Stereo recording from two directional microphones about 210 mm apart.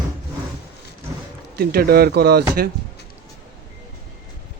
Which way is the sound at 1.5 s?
45° right (ahead or behind).